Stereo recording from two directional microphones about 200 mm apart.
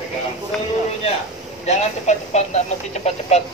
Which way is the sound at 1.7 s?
35° left (ahead or behind).